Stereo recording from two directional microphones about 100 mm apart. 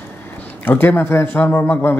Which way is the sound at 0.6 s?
20° left (ahead or behind).